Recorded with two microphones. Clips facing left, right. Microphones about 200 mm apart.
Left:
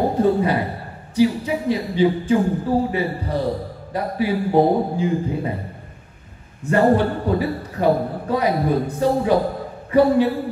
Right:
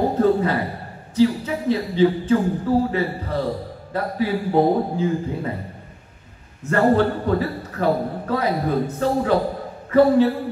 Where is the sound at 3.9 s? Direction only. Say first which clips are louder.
Left 1 dB; 15° left (ahead or behind).